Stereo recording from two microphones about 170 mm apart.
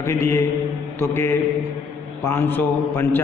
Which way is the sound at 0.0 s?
15° left (ahead or behind).